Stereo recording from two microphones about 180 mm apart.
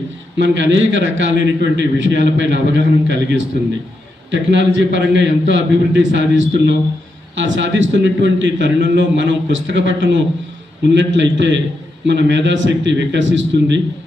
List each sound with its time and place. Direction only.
0.3 s a man's voice: 90° right